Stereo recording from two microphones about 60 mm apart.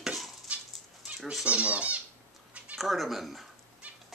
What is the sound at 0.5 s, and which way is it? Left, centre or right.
Dog, right.